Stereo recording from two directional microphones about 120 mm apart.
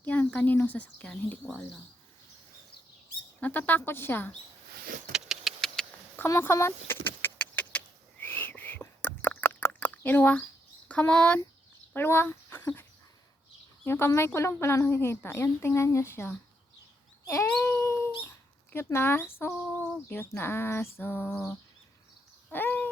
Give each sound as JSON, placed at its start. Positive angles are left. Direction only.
{"t": 0.0, "sound": "speech", "side_deg": 15}
{"t": 3.4, "sound": "speech", "side_deg": 15}
{"t": 5.1, "sound": "vehicle", "side_deg": -5}
{"t": 6.1, "sound": "vehicle", "side_deg": 20}
{"t": 10.8, "sound": "speech", "side_deg": 10}
{"t": 13.8, "sound": "speech", "side_deg": 20}
{"t": 17.2, "sound": "cat", "side_deg": 20}
{"t": 18.7, "sound": "speech", "side_deg": 20}
{"t": 22.5, "sound": "a sound", "side_deg": 15}